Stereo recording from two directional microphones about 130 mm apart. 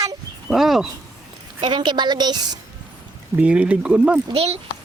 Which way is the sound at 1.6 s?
35° right (ahead or behind).